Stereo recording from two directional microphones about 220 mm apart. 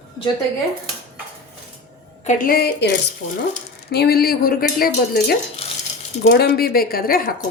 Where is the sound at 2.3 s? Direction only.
40° left (ahead or behind).